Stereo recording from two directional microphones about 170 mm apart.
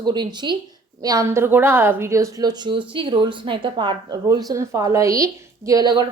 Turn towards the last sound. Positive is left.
turn(degrees=-25)  # may be behind; listen again after turning